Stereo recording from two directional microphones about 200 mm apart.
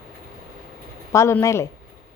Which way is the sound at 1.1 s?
15° left (ahead or behind).